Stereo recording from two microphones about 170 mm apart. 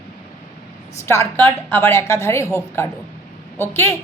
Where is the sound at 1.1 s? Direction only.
15° left (ahead or behind).